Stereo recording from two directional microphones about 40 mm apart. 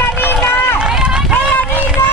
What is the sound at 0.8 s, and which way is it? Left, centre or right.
Run, right.